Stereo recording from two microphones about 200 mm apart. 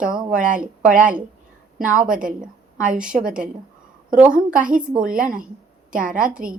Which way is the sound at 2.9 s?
5° right (ahead or behind).